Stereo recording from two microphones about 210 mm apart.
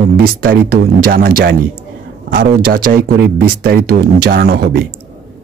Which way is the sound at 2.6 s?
45° right (ahead or behind).